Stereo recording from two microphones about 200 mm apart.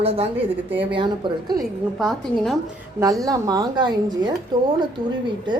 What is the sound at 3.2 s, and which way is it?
A woman's voice, 20° right (ahead or behind).